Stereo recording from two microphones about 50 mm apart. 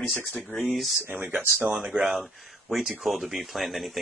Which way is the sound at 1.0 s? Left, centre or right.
Right.